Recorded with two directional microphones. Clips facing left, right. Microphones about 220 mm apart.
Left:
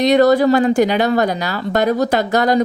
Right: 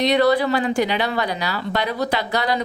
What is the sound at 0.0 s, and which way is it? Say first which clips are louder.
Speech: left 5 dB; 45° left (ahead or behind).